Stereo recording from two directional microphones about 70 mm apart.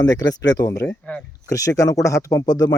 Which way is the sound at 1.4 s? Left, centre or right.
Left.